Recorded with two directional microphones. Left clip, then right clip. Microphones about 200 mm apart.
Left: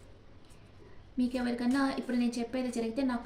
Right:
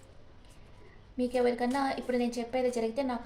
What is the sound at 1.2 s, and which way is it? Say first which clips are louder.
A woman's voice: right 5 dB; 35° right (ahead or behind).